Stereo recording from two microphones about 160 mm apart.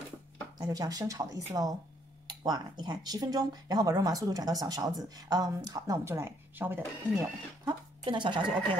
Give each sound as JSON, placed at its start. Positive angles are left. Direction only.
{"t": 0.6, "sound": "speech", "side_deg": -25}
{"t": 2.2, "sound": "a sound", "side_deg": -25}
{"t": 2.8, "sound": "speech", "side_deg": -25}
{"t": 7.6, "sound": "speech", "side_deg": -30}